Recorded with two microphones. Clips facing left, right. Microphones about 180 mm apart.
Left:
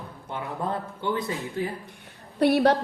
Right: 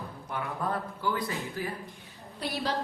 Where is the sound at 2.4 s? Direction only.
60° left (ahead or behind).